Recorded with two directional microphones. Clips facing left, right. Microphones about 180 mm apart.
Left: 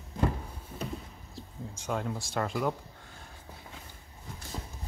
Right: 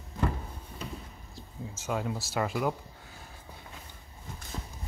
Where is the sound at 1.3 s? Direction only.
5° right (ahead or behind).